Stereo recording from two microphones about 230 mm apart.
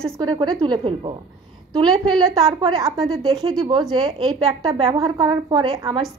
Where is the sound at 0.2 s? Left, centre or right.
Centre.